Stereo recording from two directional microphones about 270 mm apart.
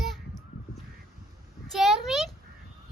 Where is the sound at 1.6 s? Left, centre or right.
Centre.